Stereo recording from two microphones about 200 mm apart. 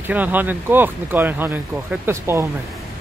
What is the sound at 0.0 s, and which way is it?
Speech, 10° right (ahead or behind).